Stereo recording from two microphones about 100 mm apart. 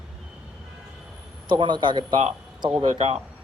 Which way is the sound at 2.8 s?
90° right.